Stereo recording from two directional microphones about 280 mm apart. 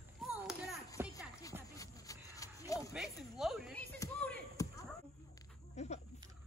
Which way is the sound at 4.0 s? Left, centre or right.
Centre.